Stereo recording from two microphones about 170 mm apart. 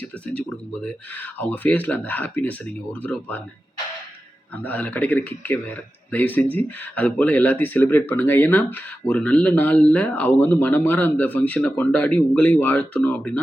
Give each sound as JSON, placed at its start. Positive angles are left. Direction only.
{"t": 0.0, "sound": "speech", "side_deg": 5}
{"t": 4.5, "sound": "speech", "side_deg": 10}